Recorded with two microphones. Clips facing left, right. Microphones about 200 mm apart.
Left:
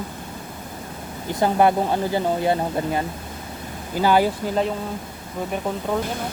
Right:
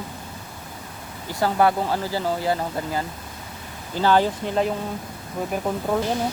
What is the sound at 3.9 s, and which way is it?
Speech, 10° left (ahead or behind).